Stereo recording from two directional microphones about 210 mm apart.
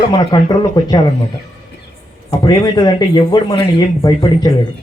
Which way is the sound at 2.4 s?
20° left (ahead or behind).